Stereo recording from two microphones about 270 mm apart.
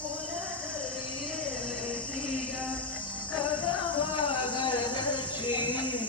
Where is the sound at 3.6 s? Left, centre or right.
Centre.